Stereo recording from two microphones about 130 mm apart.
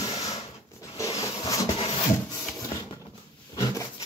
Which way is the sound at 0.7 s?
25° left (ahead or behind).